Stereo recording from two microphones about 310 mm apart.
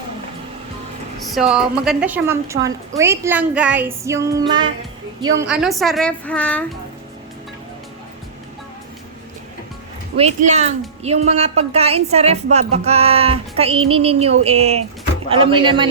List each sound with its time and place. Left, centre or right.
1.3 s a woman's voice: centre
10.2 s music: right
15.3 s a woman's voice: centre